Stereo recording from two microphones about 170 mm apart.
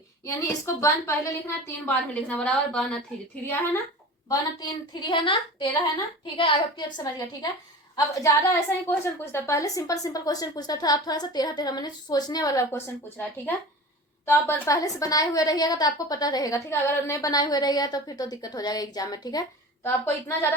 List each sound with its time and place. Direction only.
0.3 s a woman's voice: 15° left (ahead or behind)
4.9 s a woman's voice: 30° left (ahead or behind)